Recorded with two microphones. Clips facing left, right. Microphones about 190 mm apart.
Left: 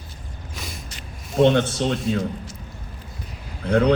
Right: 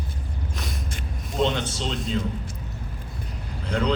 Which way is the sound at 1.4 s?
55° left (ahead or behind).